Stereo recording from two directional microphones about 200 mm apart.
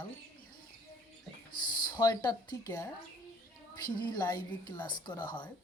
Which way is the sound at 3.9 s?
20° left (ahead or behind).